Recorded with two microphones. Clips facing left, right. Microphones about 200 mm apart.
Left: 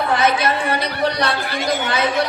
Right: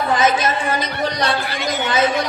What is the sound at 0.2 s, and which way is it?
A woman's voice, 60° left (ahead or behind).